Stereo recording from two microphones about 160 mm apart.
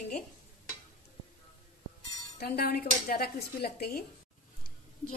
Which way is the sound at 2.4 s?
80° left.